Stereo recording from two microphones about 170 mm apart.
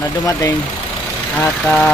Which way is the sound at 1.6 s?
5° left (ahead or behind).